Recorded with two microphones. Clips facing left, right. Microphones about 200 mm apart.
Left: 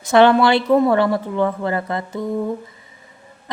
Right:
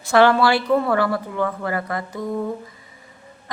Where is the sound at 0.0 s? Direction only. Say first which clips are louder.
Left 3 dB; 20° left (ahead or behind).